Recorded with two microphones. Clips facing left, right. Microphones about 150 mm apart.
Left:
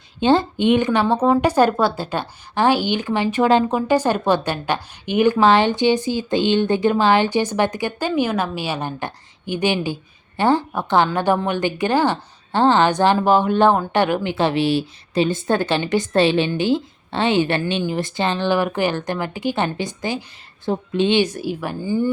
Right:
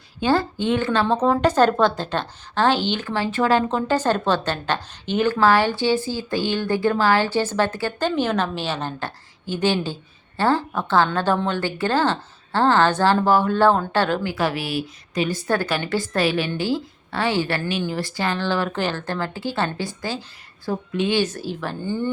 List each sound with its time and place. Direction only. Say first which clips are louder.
0.2 s a woman's voice: left 4 dB; 20° left (ahead or behind)
21.2 s a woman's voice: left 3 dB; 15° left (ahead or behind)